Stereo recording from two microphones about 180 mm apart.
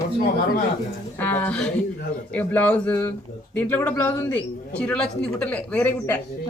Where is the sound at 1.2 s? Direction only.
10° left (ahead or behind).